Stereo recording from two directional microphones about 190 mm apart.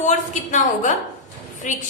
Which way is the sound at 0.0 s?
40° left (ahead or behind).